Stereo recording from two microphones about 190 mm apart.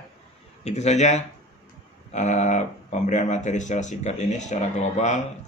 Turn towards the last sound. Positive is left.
turn(degrees=35)  # may be behind; listen again after turning